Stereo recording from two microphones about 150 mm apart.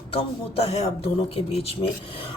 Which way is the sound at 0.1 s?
40° left (ahead or behind).